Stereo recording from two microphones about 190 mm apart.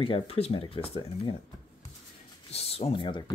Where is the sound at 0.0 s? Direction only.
30° left (ahead or behind).